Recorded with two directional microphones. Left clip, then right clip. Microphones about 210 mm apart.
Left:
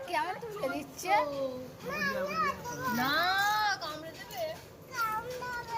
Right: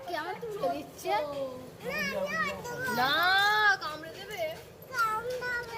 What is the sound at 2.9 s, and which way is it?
Baby cry, 50° right (ahead or behind).